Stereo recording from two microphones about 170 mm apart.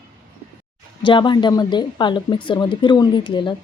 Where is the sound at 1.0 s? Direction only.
30° left (ahead or behind).